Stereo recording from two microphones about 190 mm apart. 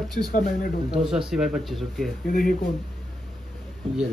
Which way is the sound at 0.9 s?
5° right (ahead or behind).